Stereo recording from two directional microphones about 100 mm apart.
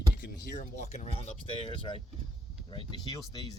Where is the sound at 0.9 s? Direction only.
90° left; by 2.0 s 70° left (ahead or behind).